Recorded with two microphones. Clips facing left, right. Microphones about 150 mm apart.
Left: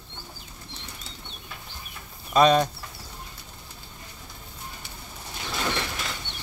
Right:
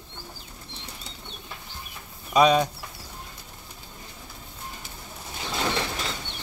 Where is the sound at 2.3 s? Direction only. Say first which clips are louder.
Even; 5° right (ahead or behind).